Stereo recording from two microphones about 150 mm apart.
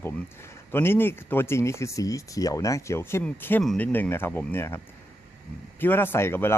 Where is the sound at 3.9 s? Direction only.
15° left (ahead or behind).